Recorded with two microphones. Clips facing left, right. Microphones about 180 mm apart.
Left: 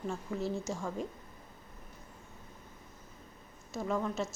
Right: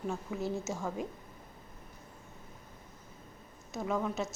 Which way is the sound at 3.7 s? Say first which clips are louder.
Even; 5° right (ahead or behind).